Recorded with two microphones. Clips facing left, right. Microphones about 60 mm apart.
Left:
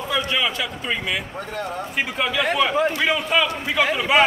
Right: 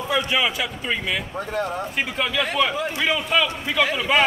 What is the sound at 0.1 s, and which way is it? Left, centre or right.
Speech, centre.